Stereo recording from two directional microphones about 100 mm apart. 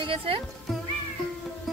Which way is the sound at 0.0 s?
65° right (ahead or behind).